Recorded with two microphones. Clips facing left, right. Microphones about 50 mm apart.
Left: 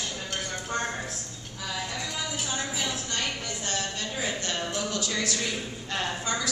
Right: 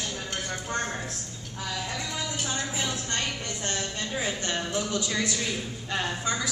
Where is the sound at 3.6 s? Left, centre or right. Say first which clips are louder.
Even; right.